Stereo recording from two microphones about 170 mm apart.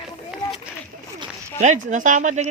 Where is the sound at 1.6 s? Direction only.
45° right (ahead or behind).